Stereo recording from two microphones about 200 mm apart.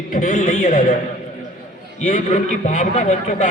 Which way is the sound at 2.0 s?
40° left (ahead or behind).